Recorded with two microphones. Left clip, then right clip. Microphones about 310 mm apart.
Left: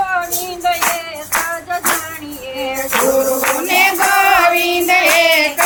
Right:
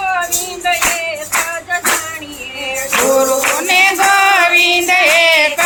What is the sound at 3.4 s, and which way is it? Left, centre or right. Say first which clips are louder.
Music: right 2 dB; centre.